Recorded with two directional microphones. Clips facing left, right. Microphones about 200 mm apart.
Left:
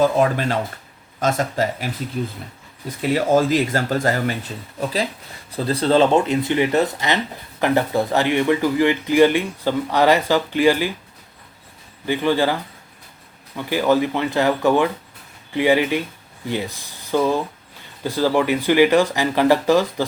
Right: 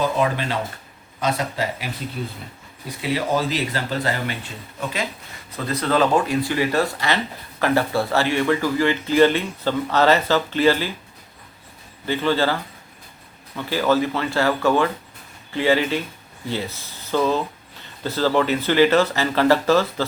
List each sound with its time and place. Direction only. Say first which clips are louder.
0.0 s speech: left 4 dB; 45° left (ahead or behind)
3.0 s speech: left 5 dB; 45° left (ahead or behind); by 10.9 s 15° left (ahead or behind)
12.0 s speech: left 2 dB; 15° left (ahead or behind)
13.6 s speech: left 2 dB; 15° left (ahead or behind)